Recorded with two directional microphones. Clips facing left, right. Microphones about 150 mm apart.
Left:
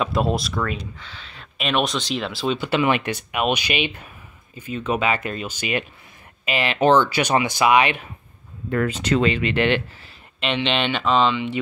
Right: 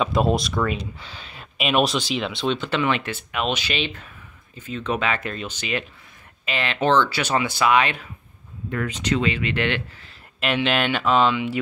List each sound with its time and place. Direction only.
0.0 s speech: centre (ahead or behind)
8.6 s speech: 50° left (ahead or behind)
9.3 s speech: 25° left (ahead or behind)
10.4 s speech: 5° right (ahead or behind)